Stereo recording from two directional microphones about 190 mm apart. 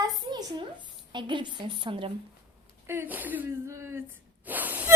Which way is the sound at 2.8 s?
10° right (ahead or behind).